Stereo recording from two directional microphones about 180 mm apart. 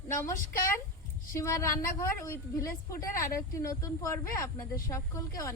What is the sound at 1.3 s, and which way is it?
A woman's voice, 15° left (ahead or behind).